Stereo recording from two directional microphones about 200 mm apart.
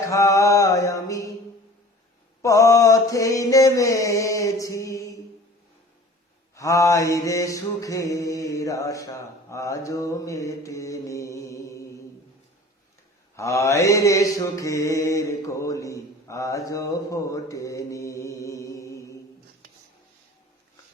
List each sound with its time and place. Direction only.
0.1 s mantra: 15° left (ahead or behind)
2.4 s mantra: 15° left (ahead or behind)
6.6 s mantra: 15° left (ahead or behind)
13.3 s mantra: 15° left (ahead or behind)